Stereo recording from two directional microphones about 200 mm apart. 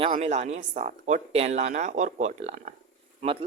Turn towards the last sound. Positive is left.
turn(degrees=-30)  # may be behind; listen again after turning